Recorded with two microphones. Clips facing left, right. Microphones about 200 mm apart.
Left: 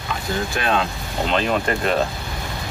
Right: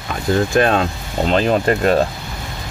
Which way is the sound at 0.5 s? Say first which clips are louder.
Right 7 dB; 45° right (ahead or behind).